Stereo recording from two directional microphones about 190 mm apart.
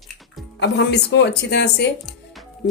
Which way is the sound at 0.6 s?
65° left (ahead or behind).